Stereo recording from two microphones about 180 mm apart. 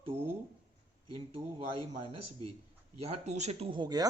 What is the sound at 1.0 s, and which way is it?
Speech, 30° right (ahead or behind).